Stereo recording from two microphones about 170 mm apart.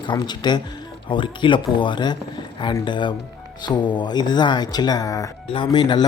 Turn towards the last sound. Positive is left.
turn(degrees=25)  # may be behind; listen again after turning